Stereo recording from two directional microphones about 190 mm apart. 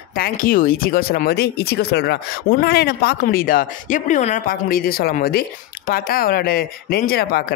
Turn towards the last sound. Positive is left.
turn(degrees=55)  # may be behind; listen again after turning